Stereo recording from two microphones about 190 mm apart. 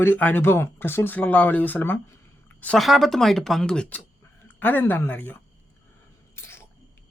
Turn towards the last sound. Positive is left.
turn(degrees=15)  # may be behind; listen again after turning